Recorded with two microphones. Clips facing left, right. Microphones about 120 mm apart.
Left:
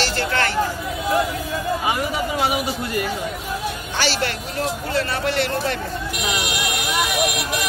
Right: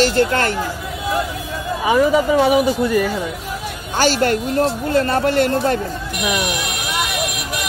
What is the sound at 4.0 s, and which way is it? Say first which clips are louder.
Speech: right 8 dB; 45° right (ahead or behind).